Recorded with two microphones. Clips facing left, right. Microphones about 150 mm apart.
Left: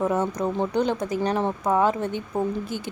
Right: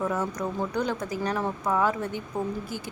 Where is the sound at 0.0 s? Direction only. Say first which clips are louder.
Left 5 dB; 25° left (ahead or behind).